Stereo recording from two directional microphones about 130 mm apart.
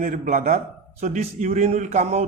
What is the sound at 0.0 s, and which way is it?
A man's voice, 75° right (ahead or behind).